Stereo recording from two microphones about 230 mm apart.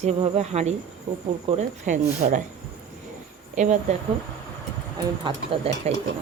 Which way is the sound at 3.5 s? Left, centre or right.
Right.